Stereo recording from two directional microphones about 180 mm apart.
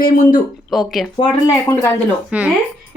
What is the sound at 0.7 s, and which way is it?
Speech, centre (ahead or behind).